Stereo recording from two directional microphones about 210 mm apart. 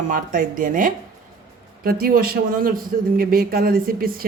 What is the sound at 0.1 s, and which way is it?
A man's voice, 40° right (ahead or behind).